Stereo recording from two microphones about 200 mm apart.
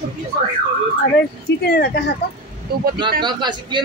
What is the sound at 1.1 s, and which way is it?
Speech, 55° left (ahead or behind).